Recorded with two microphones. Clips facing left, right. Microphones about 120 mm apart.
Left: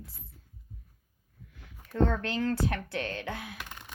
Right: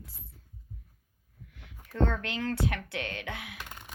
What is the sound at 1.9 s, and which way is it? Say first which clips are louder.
Speech: left 2 dB; 35° left (ahead or behind).